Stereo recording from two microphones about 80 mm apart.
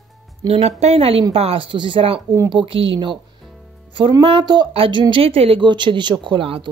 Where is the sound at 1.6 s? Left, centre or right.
Right.